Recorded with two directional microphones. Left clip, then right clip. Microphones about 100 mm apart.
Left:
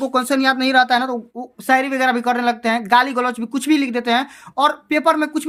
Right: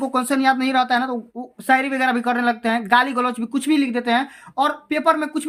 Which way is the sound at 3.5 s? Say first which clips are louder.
Left 2 dB; 45° left (ahead or behind).